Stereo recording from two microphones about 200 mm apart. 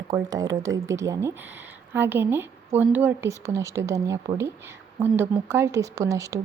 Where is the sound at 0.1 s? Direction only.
20° right (ahead or behind).